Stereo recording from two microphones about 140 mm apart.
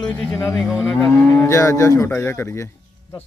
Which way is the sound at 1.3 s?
20° left (ahead or behind).